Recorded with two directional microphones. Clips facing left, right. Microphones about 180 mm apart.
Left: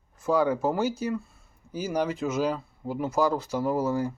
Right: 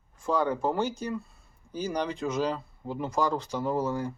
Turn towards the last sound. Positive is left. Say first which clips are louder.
# left 3 dB
turn(degrees=5)  # may be behind; listen again after turning